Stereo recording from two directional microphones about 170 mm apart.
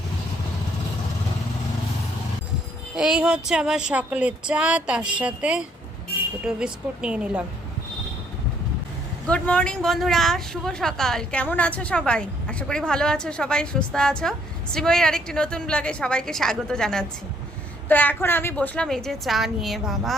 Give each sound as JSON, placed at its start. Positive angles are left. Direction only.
{"t": 2.9, "sound": "speech", "side_deg": -5}
{"t": 9.2, "sound": "a woman's voice", "side_deg": 5}